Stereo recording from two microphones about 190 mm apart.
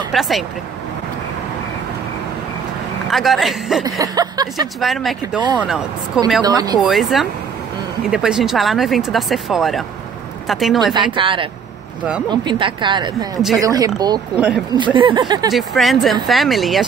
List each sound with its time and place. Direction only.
0.1 s speech: centre (ahead or behind)
3.1 s speech: centre (ahead or behind)
4.0 s speech: 20° right (ahead or behind)
4.7 s speech: centre (ahead or behind)
6.4 s speech: 20° right (ahead or behind)
6.9 s speech: centre (ahead or behind)
11.1 s speech: 25° right (ahead or behind)
14.3 s speech: 5° right (ahead or behind)
15.0 s speech: 25° right (ahead or behind)
15.5 s speech: centre (ahead or behind)